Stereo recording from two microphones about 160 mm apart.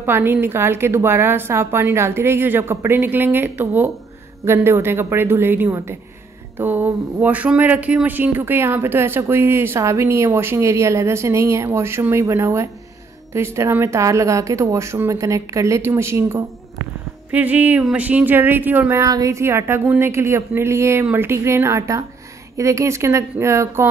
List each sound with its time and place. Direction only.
0.0 s speech: 15° right (ahead or behind)